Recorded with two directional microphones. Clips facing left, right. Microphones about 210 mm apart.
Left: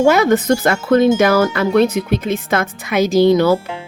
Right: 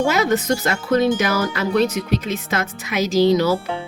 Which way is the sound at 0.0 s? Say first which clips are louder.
Left 6 dB; 55° left (ahead or behind).